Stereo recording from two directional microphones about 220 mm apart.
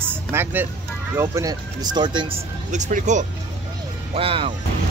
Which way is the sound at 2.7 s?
35° right (ahead or behind).